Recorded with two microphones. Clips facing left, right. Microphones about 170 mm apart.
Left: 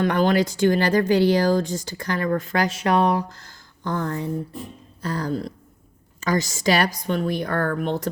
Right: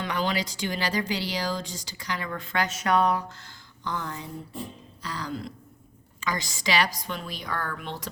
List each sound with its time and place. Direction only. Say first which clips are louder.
0.0 s a woman's voice: left 9 dB; 50° left (ahead or behind)